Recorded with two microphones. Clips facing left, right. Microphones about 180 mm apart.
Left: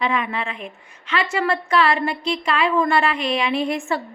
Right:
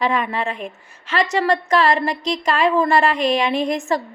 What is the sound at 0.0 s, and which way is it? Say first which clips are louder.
A woman's voice: right 3 dB; 40° right (ahead or behind).